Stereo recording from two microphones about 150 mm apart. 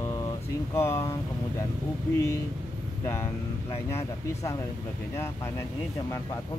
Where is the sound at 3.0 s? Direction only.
15° left (ahead or behind).